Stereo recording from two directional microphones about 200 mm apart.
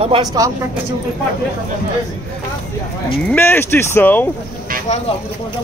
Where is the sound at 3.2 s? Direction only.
10° left (ahead or behind).